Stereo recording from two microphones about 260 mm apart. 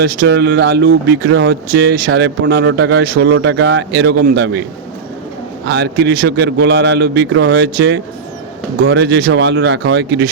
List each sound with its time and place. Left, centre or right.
0.2 s speech: right
5.6 s speech: right